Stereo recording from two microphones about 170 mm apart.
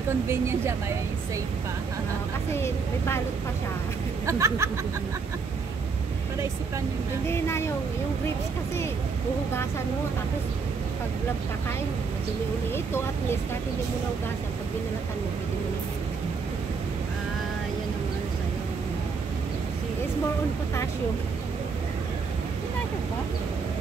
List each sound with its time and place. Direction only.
0.3 s speech: 15° right (ahead or behind)
2.5 s speech: 15° left (ahead or behind)
4.3 s speech: 15° right (ahead or behind)
7.2 s speech: 15° left (ahead or behind)
12.7 s speech: 15° left (ahead or behind)